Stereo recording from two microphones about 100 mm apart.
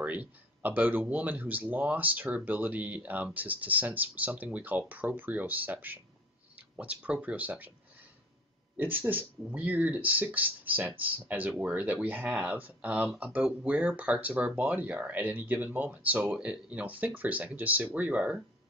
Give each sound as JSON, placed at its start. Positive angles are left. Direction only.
{"t": 0.0, "sound": "speech", "side_deg": -15}
{"t": 8.7, "sound": "speech", "side_deg": -20}